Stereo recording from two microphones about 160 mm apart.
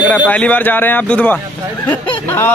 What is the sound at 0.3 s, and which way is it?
Speech, 10° left (ahead or behind).